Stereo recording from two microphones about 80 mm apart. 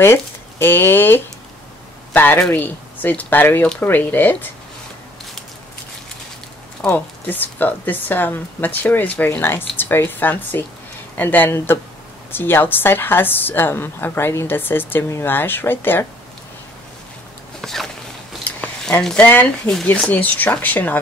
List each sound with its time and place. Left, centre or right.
0.0 s a woman's voice: left
6.9 s a woman's voice: left
17.6 s a sound: centre
19.2 s a woman's voice: left